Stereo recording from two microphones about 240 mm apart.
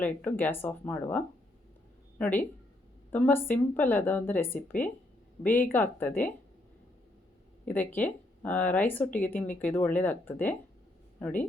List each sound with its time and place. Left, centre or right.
0.0 s speech: centre
7.6 s speech: centre